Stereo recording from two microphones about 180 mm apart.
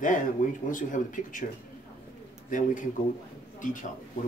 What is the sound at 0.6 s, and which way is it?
Speech, 50° left (ahead or behind).